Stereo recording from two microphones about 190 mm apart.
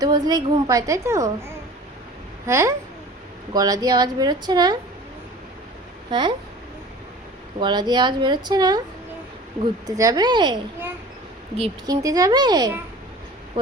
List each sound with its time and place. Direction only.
0.0 s a woman's voice: 20° right (ahead or behind)
2.5 s a woman's voice: 15° right (ahead or behind)
6.1 s speech: 25° right (ahead or behind)
7.6 s a woman's voice: 20° right (ahead or behind)
9.8 s a woman's voice: 20° right (ahead or behind)
11.9 s a woman's voice: 20° right (ahead or behind)